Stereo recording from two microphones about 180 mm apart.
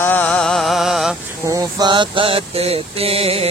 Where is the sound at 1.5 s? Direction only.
20° right (ahead or behind).